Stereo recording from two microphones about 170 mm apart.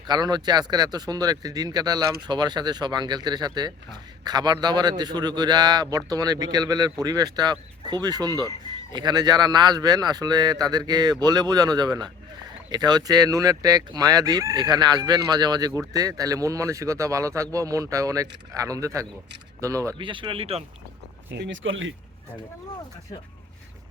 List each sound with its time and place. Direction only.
0.1 s a man's voice: 25° right (ahead or behind)
20.0 s speech: 30° right (ahead or behind)
21.3 s speech: 90° right